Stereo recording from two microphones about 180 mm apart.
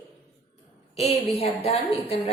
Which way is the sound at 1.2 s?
35° left (ahead or behind).